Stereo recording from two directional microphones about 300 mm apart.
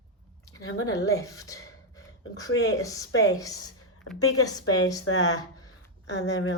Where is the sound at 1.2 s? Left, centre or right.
Centre.